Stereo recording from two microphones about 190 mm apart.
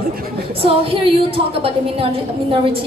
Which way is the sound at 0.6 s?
30° right (ahead or behind).